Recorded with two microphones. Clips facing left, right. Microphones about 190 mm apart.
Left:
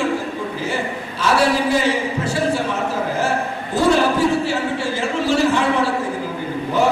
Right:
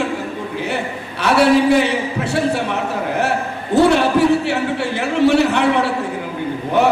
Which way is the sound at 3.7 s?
65° right (ahead or behind).